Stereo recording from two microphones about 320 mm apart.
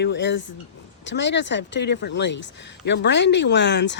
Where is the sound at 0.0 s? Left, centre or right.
Left.